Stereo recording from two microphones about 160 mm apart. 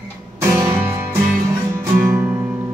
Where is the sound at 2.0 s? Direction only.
15° right (ahead or behind).